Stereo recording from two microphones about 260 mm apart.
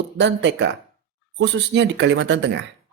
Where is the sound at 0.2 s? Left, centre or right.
Right.